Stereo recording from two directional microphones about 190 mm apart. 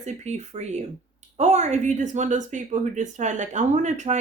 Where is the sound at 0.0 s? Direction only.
35° right (ahead or behind).